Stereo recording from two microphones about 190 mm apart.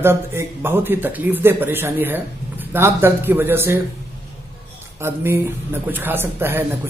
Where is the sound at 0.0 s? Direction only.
10° right (ahead or behind).